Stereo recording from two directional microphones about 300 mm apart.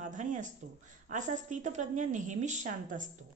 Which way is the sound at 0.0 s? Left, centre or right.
Right.